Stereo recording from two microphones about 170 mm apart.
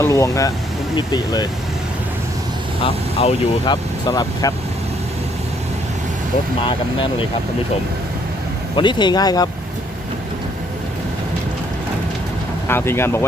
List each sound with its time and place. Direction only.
0.0 s speech: 20° left (ahead or behind)
2.8 s speech: 35° left (ahead or behind)
6.7 s speech: 30° left (ahead or behind)
8.7 s speech: 30° left (ahead or behind)
12.6 s speech: 15° left (ahead or behind)